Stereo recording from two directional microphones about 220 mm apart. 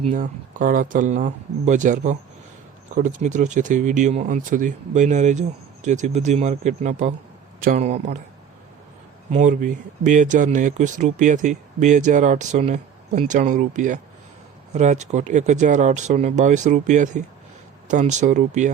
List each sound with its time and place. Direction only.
0.1 s speech: 40° right (ahead or behind)
9.3 s speech: 35° right (ahead or behind)